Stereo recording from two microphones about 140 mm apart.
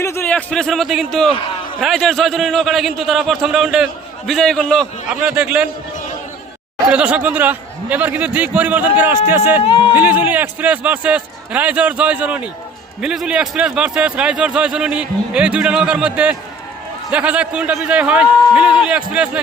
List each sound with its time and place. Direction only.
0.0 s a sound: 20° left (ahead or behind)
0.3 s a man's voice: 5° left (ahead or behind)
5.2 s a man's voice: 10° right (ahead or behind)
6.9 s a man's voice: 10° right (ahead or behind)